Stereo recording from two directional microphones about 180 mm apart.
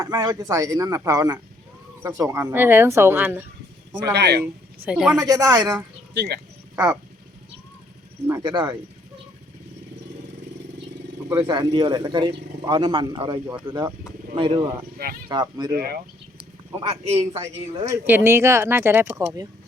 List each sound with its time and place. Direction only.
0.0 s speech: 20° right (ahead or behind)
4.1 s speech: 65° right (ahead or behind)
4.9 s speech: 5° right (ahead or behind)
5.2 s speech: 20° right (ahead or behind)
6.1 s speech: 65° right (ahead or behind)
6.7 s speech: 10° right (ahead or behind)
8.3 s speech: 25° right (ahead or behind)
11.3 s speech: 20° right (ahead or behind)
16.7 s a man's voice: 35° right (ahead or behind)
17.3 s speech: 15° right (ahead or behind)